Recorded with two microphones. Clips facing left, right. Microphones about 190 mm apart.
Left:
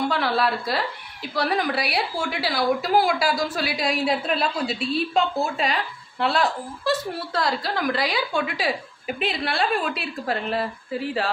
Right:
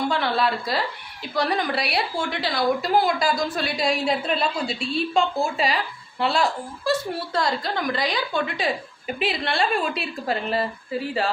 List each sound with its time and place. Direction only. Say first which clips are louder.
0.1 s a woman's voice: even; centre (ahead or behind)